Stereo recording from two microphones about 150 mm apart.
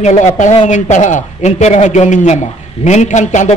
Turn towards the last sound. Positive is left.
turn(degrees=55)  # may be behind; listen again after turning